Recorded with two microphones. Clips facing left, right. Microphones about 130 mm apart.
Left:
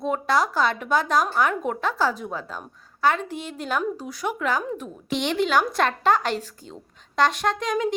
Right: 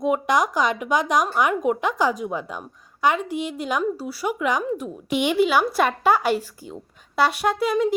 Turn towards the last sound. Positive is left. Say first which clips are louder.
# right 3 dB
turn(degrees=-10)  # may be behind; listen again after turning